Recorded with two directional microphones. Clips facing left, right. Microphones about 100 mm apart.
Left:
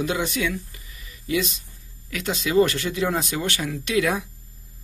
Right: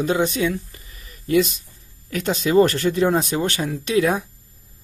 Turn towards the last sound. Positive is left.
turn(degrees=-35)  # may be behind; listen again after turning